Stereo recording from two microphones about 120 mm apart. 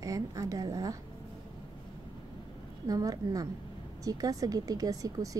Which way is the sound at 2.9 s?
30° right (ahead or behind).